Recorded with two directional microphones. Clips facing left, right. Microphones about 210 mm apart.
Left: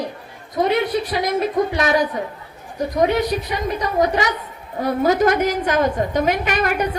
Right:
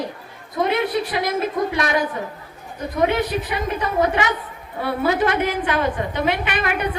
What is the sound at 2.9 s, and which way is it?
A woman's voice, 35° left (ahead or behind).